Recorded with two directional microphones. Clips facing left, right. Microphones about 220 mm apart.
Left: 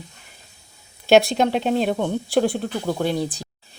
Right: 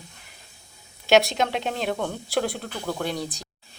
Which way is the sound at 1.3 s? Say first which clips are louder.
Left 7 dB; 40° left (ahead or behind).